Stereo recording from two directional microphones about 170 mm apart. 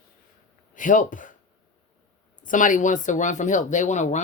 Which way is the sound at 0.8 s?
50° left (ahead or behind).